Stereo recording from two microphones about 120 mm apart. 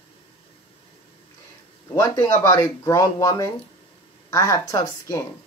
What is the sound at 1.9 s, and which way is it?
Speech, 30° left (ahead or behind).